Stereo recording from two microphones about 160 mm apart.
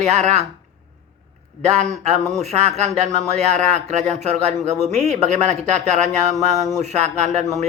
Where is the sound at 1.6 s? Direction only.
45° right (ahead or behind).